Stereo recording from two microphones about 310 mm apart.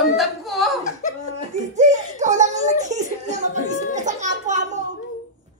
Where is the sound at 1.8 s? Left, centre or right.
Right.